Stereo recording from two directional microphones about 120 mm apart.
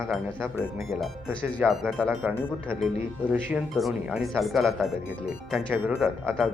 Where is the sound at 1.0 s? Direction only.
5° left (ahead or behind).